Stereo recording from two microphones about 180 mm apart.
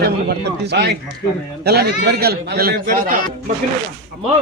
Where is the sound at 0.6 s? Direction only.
65° right (ahead or behind); by 3.1 s 50° right (ahead or behind).